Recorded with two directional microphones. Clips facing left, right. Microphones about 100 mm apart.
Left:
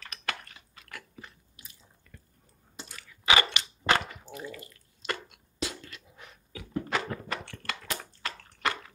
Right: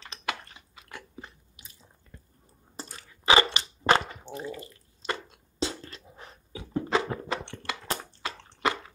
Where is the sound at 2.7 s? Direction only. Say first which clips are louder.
Right 4 dB; 35° right (ahead or behind).